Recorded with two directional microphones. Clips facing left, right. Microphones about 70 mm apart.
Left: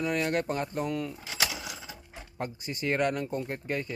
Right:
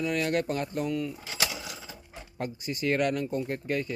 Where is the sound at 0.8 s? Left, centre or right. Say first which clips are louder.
Right 2 dB; left.